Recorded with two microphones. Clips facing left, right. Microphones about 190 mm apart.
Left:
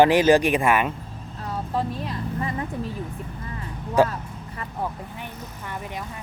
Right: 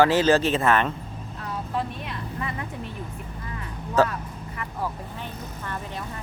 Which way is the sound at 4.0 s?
15° left (ahead or behind).